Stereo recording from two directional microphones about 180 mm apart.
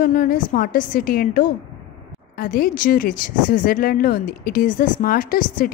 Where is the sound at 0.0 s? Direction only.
50° left (ahead or behind).